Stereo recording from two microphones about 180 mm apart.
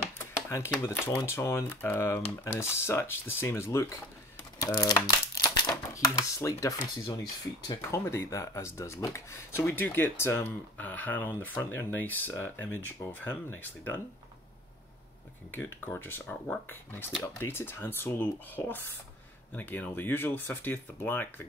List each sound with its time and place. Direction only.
0.5 s speech: 15° left (ahead or behind)
4.6 s crumpling: 20° left (ahead or behind)
7.6 s speech: 20° left (ahead or behind)
15.5 s speech: 10° left (ahead or behind)